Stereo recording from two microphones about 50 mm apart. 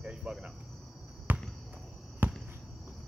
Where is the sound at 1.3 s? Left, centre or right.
Right.